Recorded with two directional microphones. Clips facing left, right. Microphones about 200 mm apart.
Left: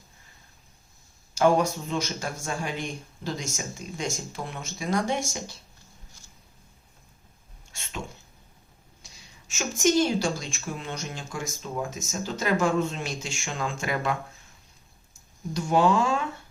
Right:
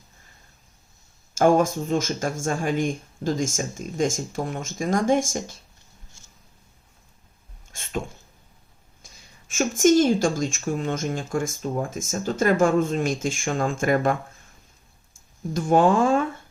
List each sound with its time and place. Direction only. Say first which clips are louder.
1.3 s a woman's voice: right 3 dB; 50° right (ahead or behind)
7.7 s a sound: right 8 dB; 50° right (ahead or behind)
9.0 s a woman's voice: right 2 dB; 50° right (ahead or behind)
15.5 s speech: right 4 dB; 50° right (ahead or behind)